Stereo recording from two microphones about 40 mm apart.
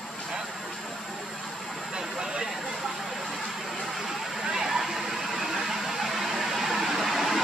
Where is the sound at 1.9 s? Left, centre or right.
Centre.